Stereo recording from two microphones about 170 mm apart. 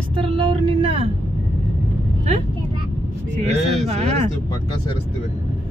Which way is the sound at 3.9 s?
40° right (ahead or behind).